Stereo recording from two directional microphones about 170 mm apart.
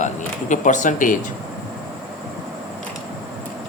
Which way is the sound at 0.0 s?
45° left (ahead or behind).